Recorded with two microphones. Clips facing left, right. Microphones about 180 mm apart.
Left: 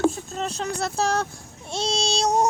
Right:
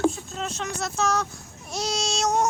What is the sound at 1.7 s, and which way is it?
Child singing, 30° left (ahead or behind).